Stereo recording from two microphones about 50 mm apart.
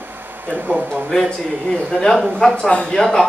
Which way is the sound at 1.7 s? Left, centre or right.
Centre.